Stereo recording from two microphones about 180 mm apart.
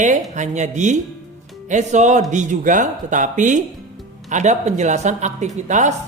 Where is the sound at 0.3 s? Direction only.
40° right (ahead or behind).